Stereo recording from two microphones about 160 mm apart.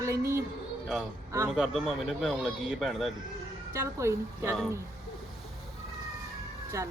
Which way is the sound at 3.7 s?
20° right (ahead or behind).